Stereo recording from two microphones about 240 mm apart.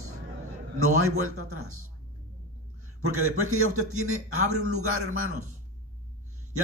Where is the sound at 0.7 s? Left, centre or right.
Right.